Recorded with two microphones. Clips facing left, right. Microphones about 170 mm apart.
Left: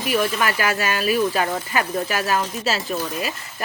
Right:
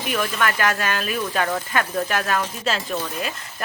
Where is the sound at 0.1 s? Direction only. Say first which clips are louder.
Left 2 dB; 10° left (ahead or behind).